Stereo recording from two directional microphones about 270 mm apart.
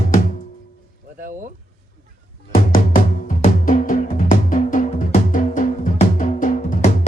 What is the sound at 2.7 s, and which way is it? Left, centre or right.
Music, left.